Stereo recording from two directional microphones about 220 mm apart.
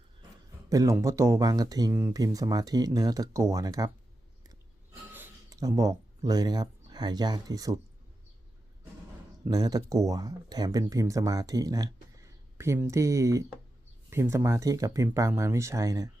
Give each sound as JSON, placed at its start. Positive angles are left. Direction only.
{"t": 0.7, "sound": "speech", "side_deg": -15}
{"t": 5.1, "sound": "speech", "side_deg": -10}
{"t": 9.4, "sound": "speech", "side_deg": -15}